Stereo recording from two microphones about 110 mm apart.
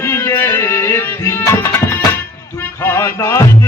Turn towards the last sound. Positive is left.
turn(degrees=20)  # may be behind; listen again after turning